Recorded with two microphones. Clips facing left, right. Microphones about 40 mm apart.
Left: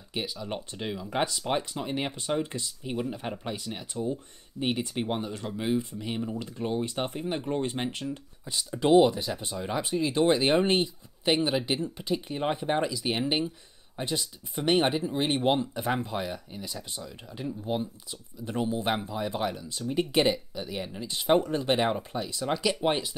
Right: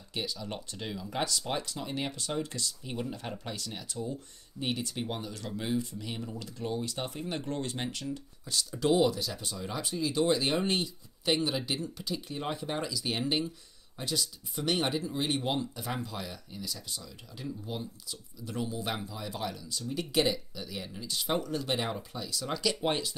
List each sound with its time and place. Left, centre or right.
0.1 s speech: centre
7.2 s speech: centre